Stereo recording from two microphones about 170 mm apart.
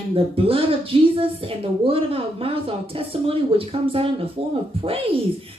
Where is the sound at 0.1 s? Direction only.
35° right (ahead or behind).